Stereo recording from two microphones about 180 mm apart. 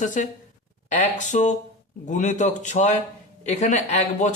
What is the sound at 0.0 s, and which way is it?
A man's voice, 45° left (ahead or behind).